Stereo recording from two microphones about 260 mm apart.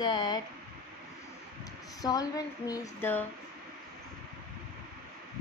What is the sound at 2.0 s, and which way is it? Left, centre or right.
Speech, centre.